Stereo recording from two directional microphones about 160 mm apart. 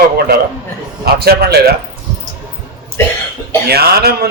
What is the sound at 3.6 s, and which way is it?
Speech, 80° right.